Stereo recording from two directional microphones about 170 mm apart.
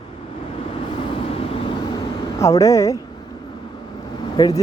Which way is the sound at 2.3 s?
20° left (ahead or behind).